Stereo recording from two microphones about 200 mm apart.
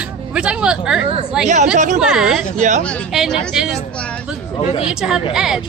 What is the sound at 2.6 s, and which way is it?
Speech, 40° right (ahead or behind).